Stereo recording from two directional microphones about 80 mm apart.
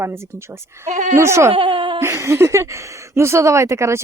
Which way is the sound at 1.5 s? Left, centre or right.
Right.